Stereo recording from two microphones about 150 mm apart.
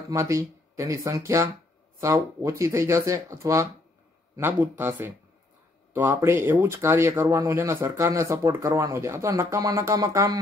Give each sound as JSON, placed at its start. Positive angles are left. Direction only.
{"t": 0.1, "sound": "speech", "side_deg": -20}